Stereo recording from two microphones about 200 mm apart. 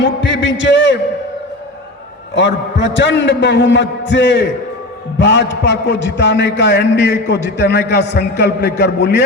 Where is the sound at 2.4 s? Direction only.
60° left (ahead or behind).